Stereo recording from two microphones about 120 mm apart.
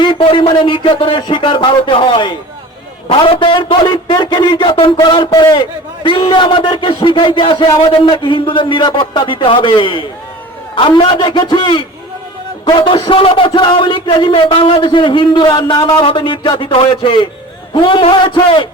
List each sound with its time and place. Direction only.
0.0 s a man's voice: 45° left (ahead or behind)